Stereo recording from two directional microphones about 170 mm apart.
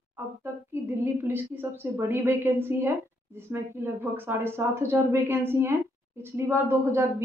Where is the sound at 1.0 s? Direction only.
10° right (ahead or behind).